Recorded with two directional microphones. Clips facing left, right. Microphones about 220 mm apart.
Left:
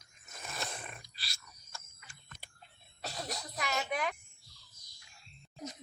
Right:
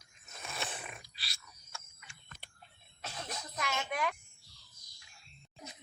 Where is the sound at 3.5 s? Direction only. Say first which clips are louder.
Left 1 dB; 5° left (ahead or behind).